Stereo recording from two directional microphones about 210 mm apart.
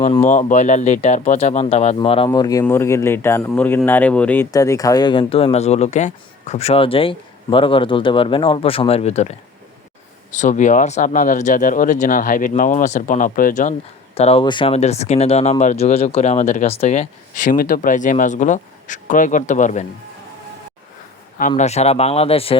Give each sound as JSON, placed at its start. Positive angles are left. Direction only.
{"t": 0.2, "sound": "speech", "side_deg": 35}
{"t": 10.3, "sound": "speech", "side_deg": 35}
{"t": 21.5, "sound": "speech", "side_deg": 30}